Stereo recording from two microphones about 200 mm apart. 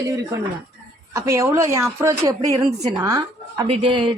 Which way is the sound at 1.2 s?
15° right (ahead or behind).